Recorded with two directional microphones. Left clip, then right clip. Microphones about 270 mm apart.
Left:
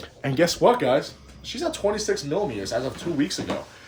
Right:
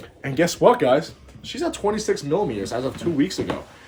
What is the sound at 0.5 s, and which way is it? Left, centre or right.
Speech, centre.